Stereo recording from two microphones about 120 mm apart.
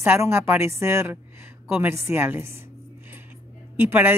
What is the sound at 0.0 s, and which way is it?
Speech, 20° right (ahead or behind).